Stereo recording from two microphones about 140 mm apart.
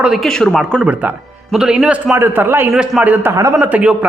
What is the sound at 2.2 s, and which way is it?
Speech, 15° right (ahead or behind).